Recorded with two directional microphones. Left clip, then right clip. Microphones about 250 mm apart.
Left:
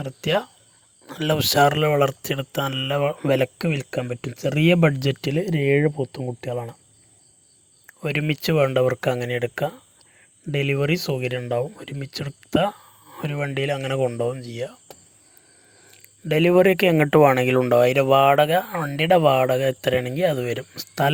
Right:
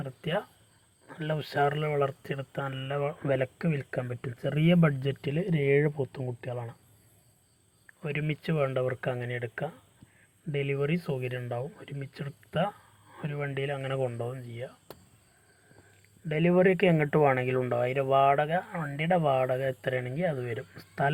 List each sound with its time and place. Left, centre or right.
0.0 s speech: left
7.9 s speech: left
15.9 s speech: left